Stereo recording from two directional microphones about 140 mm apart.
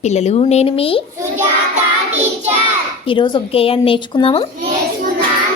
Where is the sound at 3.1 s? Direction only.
35° left (ahead or behind).